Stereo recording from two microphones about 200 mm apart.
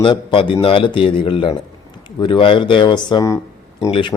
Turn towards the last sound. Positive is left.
turn(degrees=20)  # may be behind; listen again after turning